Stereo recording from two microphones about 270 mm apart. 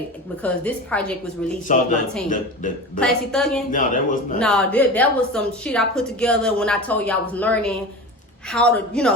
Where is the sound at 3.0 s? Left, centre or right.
Centre.